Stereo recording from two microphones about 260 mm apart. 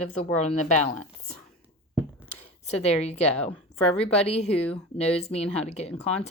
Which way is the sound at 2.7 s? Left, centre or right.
Left.